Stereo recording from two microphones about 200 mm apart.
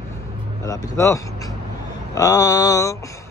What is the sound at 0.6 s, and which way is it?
Speech, 15° left (ahead or behind).